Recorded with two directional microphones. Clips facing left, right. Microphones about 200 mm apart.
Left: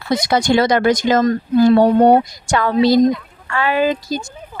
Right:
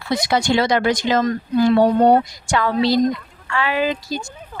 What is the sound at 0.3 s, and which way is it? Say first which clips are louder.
A woman's voice: left 3 dB; 45° left (ahead or behind).